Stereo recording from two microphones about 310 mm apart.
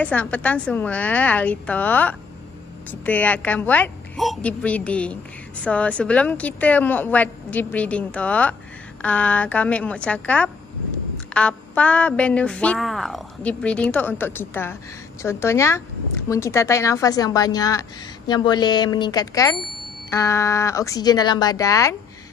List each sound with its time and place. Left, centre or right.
0.0 s a woman's voice: centre